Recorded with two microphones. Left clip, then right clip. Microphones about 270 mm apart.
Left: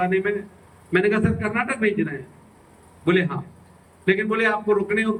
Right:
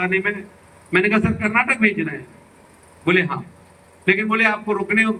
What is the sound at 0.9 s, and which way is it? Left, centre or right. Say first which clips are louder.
A man's voice: right 2 dB; centre.